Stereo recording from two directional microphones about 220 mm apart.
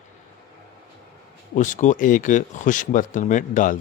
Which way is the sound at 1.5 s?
35° left (ahead or behind).